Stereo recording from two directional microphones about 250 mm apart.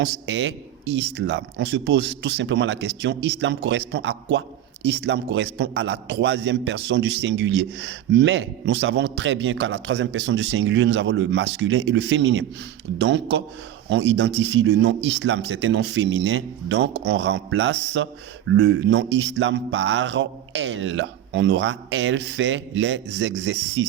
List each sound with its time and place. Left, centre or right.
0.0 s a man's voice: right